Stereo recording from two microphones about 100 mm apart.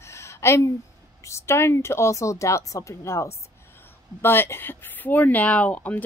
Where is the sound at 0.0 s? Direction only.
30° left (ahead or behind).